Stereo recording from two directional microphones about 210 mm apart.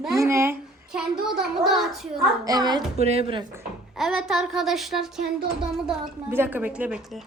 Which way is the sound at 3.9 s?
Centre (ahead or behind).